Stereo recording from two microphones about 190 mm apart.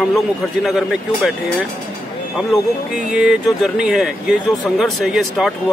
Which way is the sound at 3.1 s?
5° right (ahead or behind).